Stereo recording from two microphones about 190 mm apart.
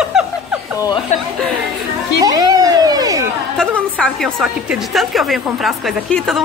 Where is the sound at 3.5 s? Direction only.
5° left (ahead or behind).